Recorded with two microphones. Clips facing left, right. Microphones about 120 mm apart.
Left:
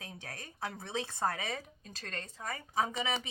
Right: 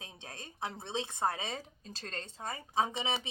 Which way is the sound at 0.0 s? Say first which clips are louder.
Left 2 dB; 25° right (ahead or behind).